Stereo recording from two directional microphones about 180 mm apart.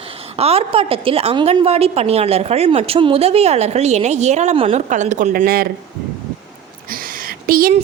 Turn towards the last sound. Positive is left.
turn(degrees=-55)  # may be behind; listen again after turning